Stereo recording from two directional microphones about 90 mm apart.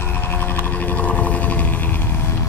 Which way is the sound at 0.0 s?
20° left (ahead or behind).